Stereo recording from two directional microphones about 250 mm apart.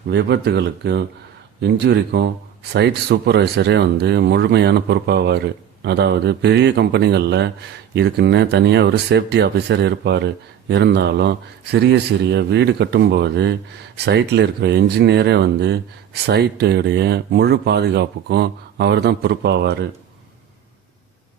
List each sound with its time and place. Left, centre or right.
0.1 s speech: right